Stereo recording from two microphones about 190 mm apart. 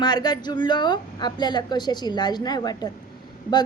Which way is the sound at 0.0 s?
20° left (ahead or behind).